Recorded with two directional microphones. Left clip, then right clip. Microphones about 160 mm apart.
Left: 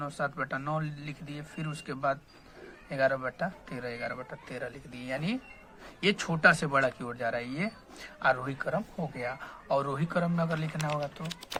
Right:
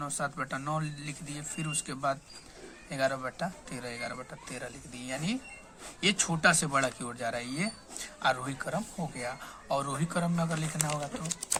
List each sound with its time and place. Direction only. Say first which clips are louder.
0.0 s speech: left 1 dB; 15° left (ahead or behind)